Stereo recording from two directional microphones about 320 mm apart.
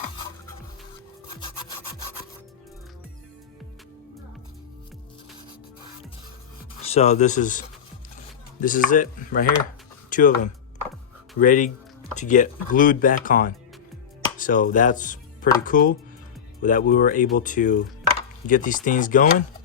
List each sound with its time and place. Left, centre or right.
6.8 s speech: centre
8.6 s speech: left